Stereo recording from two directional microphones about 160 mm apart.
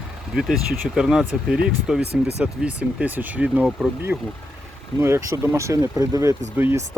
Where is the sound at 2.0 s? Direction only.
90° right.